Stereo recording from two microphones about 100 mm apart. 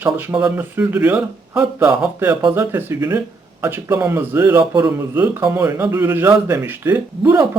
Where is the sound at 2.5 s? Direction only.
20° right (ahead or behind).